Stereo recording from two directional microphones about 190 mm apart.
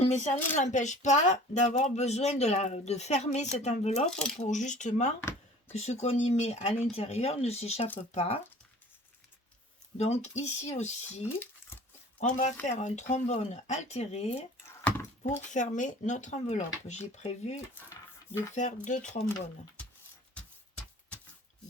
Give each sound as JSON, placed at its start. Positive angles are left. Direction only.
{"t": 0.0, "sound": "speech", "side_deg": 35}
{"t": 4.0, "sound": "speech", "side_deg": 5}
{"t": 4.4, "sound": "speech", "side_deg": 40}
{"t": 10.0, "sound": "speech", "side_deg": 35}
{"t": 12.2, "sound": "speech", "side_deg": 40}
{"t": 15.5, "sound": "speech", "side_deg": 40}
{"t": 20.3, "sound": "a sound", "side_deg": 5}